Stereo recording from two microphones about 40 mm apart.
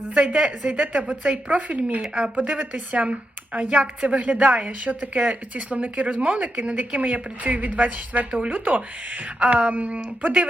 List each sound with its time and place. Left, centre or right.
0.3 s a woman's voice: right
0.7 s speech: right
2.0 s a woman's voice: right
2.3 s speech: right